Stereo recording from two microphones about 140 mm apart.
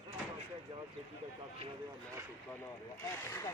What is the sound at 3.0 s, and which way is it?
Speech, 20° left (ahead or behind).